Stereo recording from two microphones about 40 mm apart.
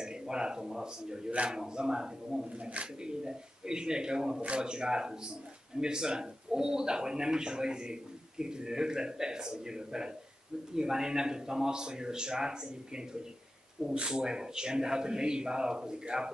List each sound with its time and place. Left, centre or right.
0.0 s a man's voice: centre
2.5 s a man's voice: right